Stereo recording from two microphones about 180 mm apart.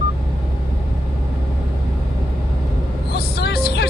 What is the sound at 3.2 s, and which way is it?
Vehicle, 60° left (ahead or behind).